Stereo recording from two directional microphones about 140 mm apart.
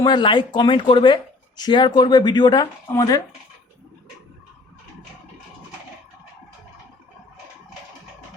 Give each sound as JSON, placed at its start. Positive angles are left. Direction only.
{"t": 0.0, "sound": "speech", "side_deg": 35}